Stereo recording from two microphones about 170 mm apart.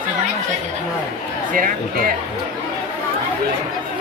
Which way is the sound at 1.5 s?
55° right (ahead or behind).